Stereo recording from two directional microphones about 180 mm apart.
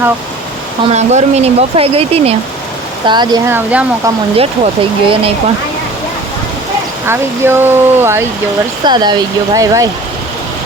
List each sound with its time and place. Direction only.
0.9 s speech: 40° right (ahead or behind)
3.5 s speech: 5° right (ahead or behind)
4.4 s speech: 30° right (ahead or behind)
7.1 s speech: 15° right (ahead or behind)
8.8 s speech: 25° right (ahead or behind)